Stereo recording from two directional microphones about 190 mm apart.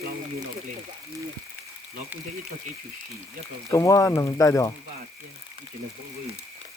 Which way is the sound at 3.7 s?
15° left (ahead or behind).